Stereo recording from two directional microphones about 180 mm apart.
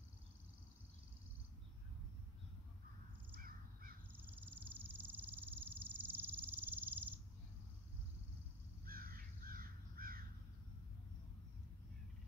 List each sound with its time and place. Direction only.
3.3 s crow: 55° right (ahead or behind)
4.1 s a sound: 10° right (ahead or behind)
8.8 s crow: 55° right (ahead or behind)